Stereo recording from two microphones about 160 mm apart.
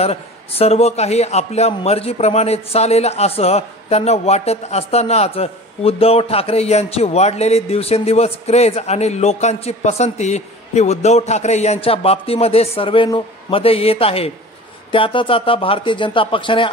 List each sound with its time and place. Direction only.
0.0 s a man's voice: 40° left (ahead or behind)